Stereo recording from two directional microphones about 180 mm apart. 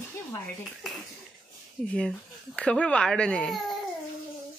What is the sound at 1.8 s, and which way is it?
Speech, 5° left (ahead or behind).